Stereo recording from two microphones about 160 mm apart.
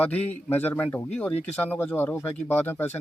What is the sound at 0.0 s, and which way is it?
Speech, 10° left (ahead or behind).